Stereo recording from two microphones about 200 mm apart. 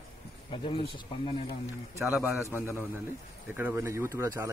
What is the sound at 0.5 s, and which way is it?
Speech, 25° left (ahead or behind).